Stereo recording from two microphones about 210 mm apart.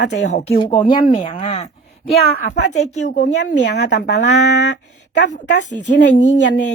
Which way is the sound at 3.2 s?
55° left (ahead or behind).